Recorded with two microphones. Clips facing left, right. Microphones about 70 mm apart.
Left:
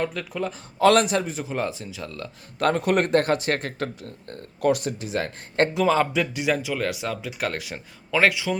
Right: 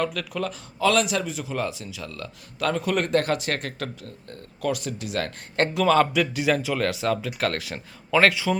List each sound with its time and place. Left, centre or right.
0.0 s speech: left
0.8 s speech: left
1.2 s speech: left
2.6 s speech: left
4.3 s speech: left
4.9 s speech: left
5.2 s speech: centre